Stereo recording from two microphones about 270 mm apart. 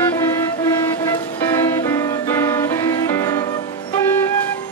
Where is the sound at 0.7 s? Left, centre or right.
Centre.